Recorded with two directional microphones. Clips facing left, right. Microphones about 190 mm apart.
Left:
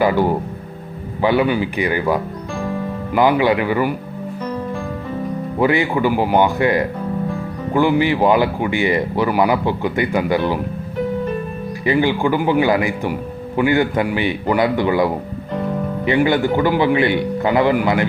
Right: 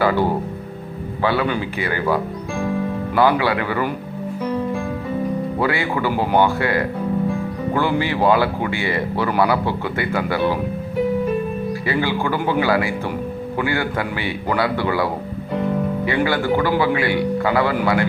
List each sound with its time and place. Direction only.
1.2 s speech: 15° left (ahead or behind)
5.5 s speech: 20° left (ahead or behind)
11.9 s speech: 15° left (ahead or behind)